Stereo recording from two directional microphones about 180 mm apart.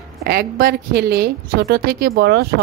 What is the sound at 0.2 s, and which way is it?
A woman's voice, 60° right (ahead or behind).